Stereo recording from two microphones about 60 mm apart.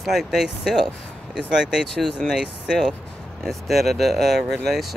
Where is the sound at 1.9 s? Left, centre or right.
Centre.